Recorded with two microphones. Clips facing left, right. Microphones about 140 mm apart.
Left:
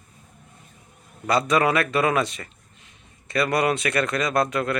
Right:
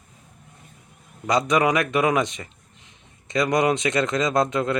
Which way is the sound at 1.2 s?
15° right (ahead or behind).